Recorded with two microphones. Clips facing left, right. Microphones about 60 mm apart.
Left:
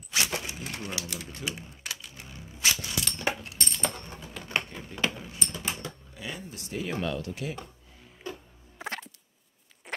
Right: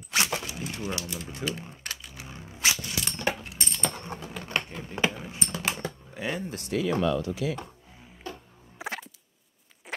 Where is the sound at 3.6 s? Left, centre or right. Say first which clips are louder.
Left 2 dB; centre.